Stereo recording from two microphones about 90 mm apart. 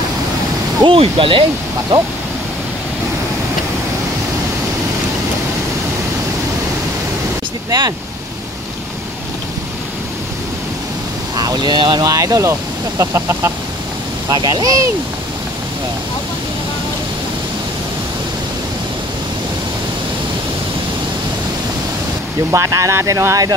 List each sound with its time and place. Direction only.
0.8 s speech: 85° right
7.7 s speech: 50° right (ahead or behind)
11.3 s speech: 50° right (ahead or behind); by 13.5 s 30° right (ahead or behind)
14.3 s speech: 45° right (ahead or behind)
22.5 s speech: 35° right (ahead or behind)